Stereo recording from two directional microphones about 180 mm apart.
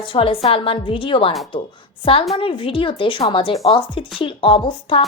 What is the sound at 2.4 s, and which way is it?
A woman's voice, 30° left (ahead or behind).